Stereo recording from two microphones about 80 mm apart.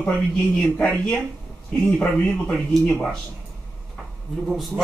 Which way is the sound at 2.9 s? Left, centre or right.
Centre.